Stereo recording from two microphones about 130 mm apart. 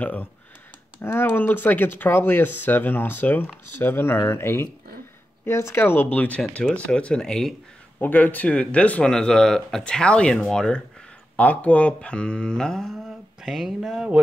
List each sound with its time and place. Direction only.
0.0 s speech: 15° left (ahead or behind); by 14.2 s 5° right (ahead or behind)